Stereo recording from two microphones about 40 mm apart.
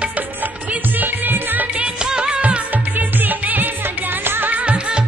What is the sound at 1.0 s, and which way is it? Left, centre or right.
Music, right.